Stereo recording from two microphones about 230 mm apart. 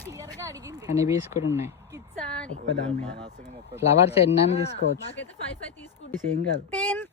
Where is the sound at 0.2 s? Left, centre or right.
Centre.